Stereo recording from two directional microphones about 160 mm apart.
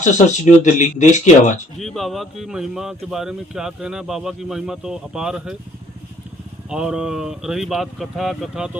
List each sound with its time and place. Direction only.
0.0 s speech: 50° left (ahead or behind)
1.8 s speech: centre (ahead or behind)
6.7 s speech: 5° right (ahead or behind)